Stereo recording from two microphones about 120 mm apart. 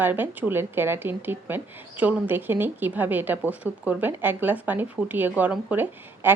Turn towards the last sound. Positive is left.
turn(degrees=-15)  # may be behind; listen again after turning